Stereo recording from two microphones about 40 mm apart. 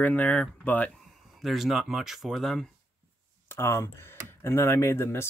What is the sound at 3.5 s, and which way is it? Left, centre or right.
Speech, left.